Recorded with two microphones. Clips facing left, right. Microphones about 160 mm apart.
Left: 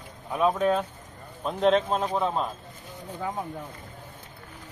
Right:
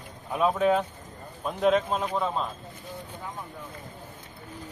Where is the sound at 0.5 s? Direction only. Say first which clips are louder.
Right 1 dB; 15° right (ahead or behind); by 2.5 s 5° left (ahead or behind).